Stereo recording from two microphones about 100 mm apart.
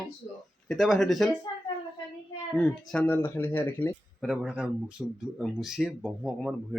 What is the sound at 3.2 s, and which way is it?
Speech, 20° left (ahead or behind).